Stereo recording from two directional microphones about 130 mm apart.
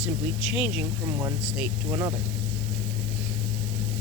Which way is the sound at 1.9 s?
20° right (ahead or behind).